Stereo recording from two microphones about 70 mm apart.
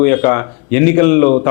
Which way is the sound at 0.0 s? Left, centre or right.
Left.